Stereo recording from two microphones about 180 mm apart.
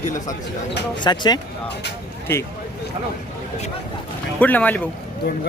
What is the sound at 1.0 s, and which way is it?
Speech, 25° left (ahead or behind).